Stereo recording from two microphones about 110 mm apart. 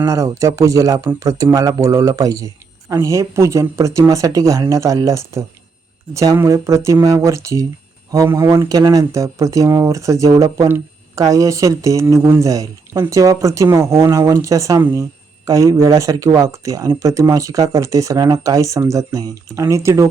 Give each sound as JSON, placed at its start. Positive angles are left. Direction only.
{"t": 0.0, "sound": "speech", "side_deg": -30}